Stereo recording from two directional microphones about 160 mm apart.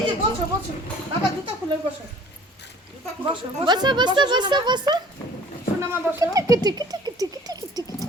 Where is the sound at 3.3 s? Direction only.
25° right (ahead or behind).